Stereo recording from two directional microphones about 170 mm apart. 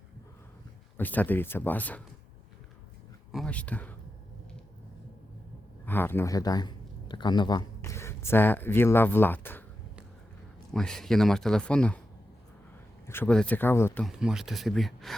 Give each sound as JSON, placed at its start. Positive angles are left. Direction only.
{"t": 0.9, "sound": "speech", "side_deg": 10}
{"t": 3.3, "sound": "speech", "side_deg": 5}
{"t": 5.8, "sound": "speech", "side_deg": 10}
{"t": 7.8, "sound": "speech", "side_deg": 15}
{"t": 10.7, "sound": "speech", "side_deg": 5}
{"t": 13.1, "sound": "speech", "side_deg": 10}
{"t": 14.0, "sound": "speech", "side_deg": -5}